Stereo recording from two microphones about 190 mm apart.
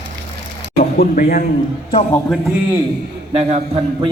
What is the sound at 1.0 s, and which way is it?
Speech, 50° left (ahead or behind).